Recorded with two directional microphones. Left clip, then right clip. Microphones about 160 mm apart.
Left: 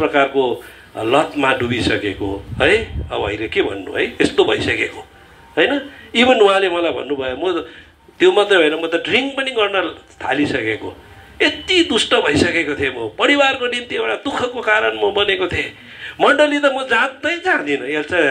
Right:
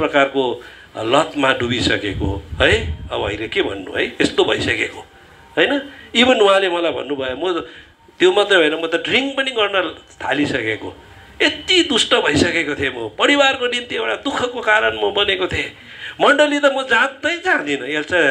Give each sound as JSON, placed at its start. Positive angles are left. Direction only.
{"t": 0.0, "sound": "a man's voice", "side_deg": -25}